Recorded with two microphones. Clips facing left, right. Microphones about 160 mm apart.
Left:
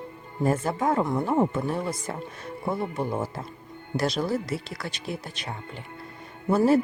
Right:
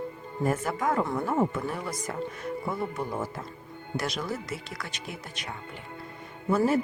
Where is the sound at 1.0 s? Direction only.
15° left (ahead or behind).